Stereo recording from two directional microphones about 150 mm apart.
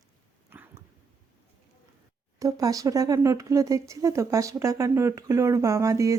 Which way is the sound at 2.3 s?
20° right (ahead or behind).